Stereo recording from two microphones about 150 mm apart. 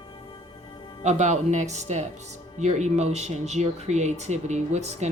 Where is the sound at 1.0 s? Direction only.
50° right (ahead or behind).